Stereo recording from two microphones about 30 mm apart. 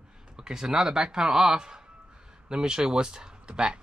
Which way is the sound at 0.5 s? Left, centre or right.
Right.